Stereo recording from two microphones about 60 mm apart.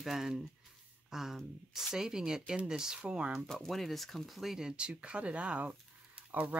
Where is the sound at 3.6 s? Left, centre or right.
Centre.